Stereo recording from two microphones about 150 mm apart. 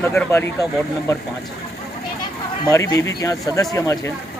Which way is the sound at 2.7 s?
20° left (ahead or behind).